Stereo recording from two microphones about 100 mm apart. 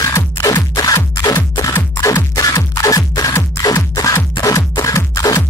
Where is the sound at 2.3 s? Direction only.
35° left (ahead or behind).